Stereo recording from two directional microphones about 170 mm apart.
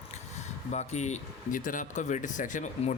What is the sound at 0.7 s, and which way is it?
Speech, 45° left (ahead or behind).